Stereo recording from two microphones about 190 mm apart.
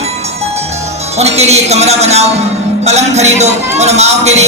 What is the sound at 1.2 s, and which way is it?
A man's voice, 35° right (ahead or behind).